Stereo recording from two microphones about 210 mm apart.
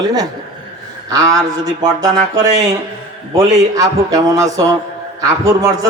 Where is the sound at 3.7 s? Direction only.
15° right (ahead or behind).